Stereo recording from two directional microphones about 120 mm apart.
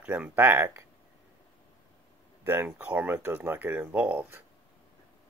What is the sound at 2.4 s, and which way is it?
Speech, 15° right (ahead or behind).